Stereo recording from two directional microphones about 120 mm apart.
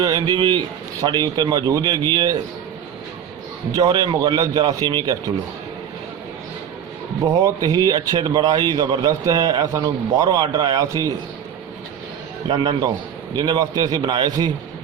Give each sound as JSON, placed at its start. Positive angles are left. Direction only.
{"t": 0.0, "sound": "a man's voice", "side_deg": -35}
{"t": 3.7, "sound": "a man's voice", "side_deg": -30}
{"t": 7.4, "sound": "a man's voice", "side_deg": -30}
{"t": 12.5, "sound": "a man's voice", "side_deg": -35}